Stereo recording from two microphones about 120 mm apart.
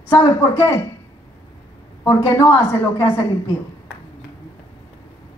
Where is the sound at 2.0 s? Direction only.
20° left (ahead or behind).